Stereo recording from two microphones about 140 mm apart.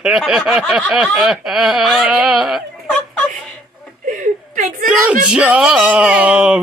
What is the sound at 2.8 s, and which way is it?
Chuckle, 10° left (ahead or behind).